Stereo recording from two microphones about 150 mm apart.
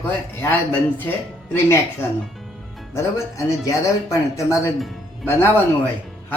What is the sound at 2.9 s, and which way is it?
A man's voice, 20° left (ahead or behind).